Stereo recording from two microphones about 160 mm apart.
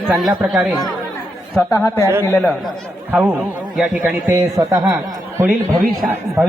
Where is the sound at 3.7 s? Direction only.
10° right (ahead or behind).